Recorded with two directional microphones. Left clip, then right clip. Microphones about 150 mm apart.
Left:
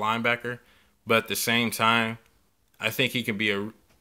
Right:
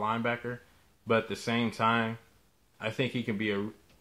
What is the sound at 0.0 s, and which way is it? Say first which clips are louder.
Speech: left 6 dB; 20° left (ahead or behind).